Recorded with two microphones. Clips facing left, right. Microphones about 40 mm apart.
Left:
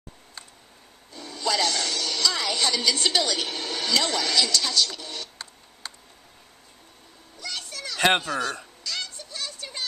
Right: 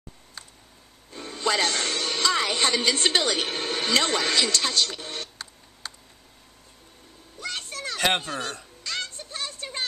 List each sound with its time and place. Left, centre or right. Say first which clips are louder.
1.1 s speech: right 1 dB; right
5.4 s computer keyboard: even; centre
7.3 s a sound: right 2 dB; right
8.2 s speech: left 4 dB; right
8.8 s music: right 2 dB; right